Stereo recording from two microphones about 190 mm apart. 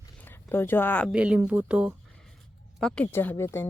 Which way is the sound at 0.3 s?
10° left (ahead or behind).